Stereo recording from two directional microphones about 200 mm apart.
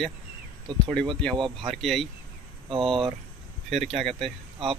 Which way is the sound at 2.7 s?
25° right (ahead or behind).